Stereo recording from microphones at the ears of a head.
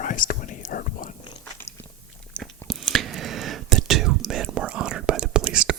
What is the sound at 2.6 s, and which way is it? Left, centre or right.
Whispering, right.